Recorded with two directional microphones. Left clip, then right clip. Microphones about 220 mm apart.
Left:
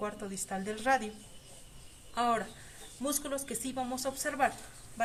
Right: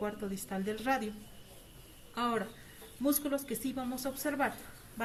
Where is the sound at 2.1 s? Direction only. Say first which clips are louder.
Left 3 dB; 45° left (ahead or behind).